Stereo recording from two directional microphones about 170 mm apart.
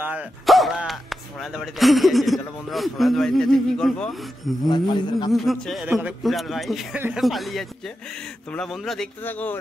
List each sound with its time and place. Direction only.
0.0 s speech: 10° right (ahead or behind)
4.6 s a man's voice: 25° left (ahead or behind)
5.3 s speech: centre (ahead or behind)